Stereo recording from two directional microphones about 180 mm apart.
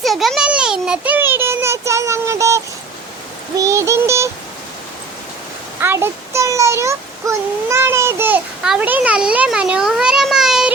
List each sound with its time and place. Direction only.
0.0 s a sound: centre (ahead or behind); by 2.6 s 15° right (ahead or behind)
3.6 s speech: 15° right (ahead or behind)
5.8 s speech: 15° right (ahead or behind)